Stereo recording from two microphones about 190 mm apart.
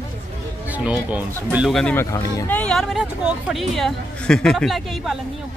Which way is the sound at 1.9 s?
10° left (ahead or behind).